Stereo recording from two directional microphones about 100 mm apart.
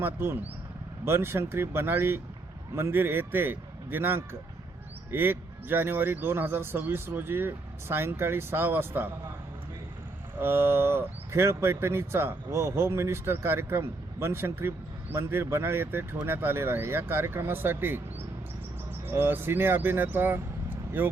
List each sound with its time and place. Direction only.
0.0 s speech: 25° right (ahead or behind)
10.4 s speech: 25° right (ahead or behind)
19.0 s speech: 20° right (ahead or behind)